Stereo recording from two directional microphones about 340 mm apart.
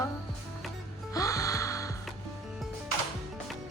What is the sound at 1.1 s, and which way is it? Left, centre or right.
Gasp, centre.